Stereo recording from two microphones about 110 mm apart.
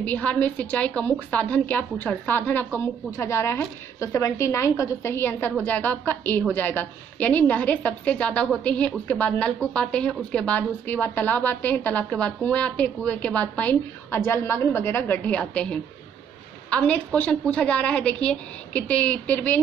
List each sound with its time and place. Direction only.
0.0 s a woman's voice: 15° left (ahead or behind)